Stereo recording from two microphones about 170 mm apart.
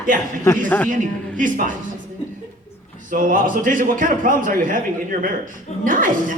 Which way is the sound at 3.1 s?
50° right (ahead or behind).